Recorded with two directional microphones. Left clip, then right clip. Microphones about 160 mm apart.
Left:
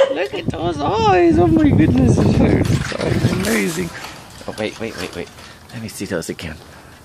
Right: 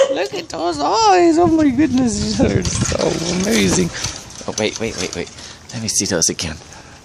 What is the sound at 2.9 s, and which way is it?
Speech, 35° right (ahead or behind).